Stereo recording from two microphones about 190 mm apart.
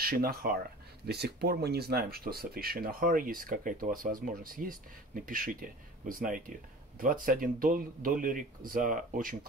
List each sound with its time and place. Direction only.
0.0 s speech: 50° right (ahead or behind)